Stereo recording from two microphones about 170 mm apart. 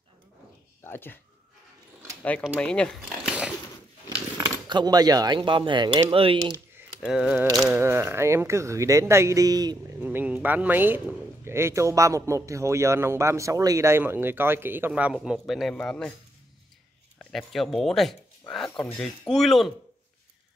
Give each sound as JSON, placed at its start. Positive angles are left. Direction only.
{"t": 0.8, "sound": "speech", "side_deg": 10}
{"t": 2.5, "sound": "speech", "side_deg": 5}
{"t": 3.3, "sound": "biting", "side_deg": -5}
{"t": 4.6, "sound": "speech", "side_deg": -25}
{"t": 7.0, "sound": "speech", "side_deg": -5}
{"t": 7.7, "sound": "speech", "side_deg": -15}
{"t": 9.9, "sound": "speech", "side_deg": -10}
{"t": 17.2, "sound": "speech", "side_deg": 5}